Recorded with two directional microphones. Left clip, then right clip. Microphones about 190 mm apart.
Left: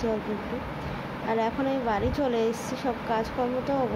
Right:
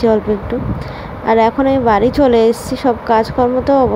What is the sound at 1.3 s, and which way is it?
Speech, 40° right (ahead or behind).